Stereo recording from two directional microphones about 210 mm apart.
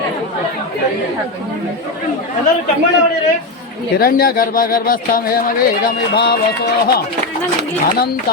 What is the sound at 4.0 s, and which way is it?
Speech, 45° left (ahead or behind).